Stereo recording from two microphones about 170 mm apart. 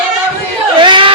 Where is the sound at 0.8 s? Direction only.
30° right (ahead or behind).